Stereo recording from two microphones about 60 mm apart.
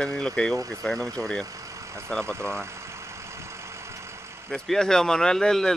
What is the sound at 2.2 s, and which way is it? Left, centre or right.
Speech, right.